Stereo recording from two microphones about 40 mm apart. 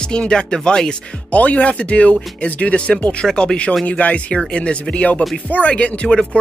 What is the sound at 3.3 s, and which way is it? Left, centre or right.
Speech, left.